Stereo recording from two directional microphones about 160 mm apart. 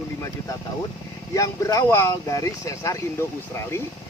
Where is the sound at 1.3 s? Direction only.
20° left (ahead or behind).